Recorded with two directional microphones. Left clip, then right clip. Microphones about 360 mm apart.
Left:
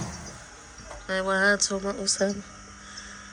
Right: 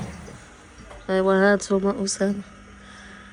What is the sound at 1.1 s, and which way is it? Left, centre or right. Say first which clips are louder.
Speech: right 4 dB; centre.